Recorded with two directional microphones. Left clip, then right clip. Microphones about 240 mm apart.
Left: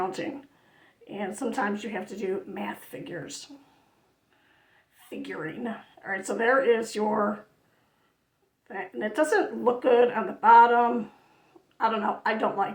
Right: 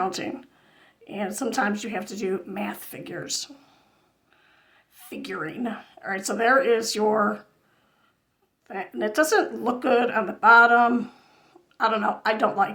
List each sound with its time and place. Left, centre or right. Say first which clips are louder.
0.0 s speech: right 3 dB; right
4.9 s speech: right 4 dB; right
8.6 s speech: right 4 dB; right